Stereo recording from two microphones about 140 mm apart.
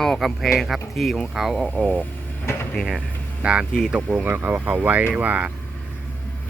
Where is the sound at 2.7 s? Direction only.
Centre (ahead or behind).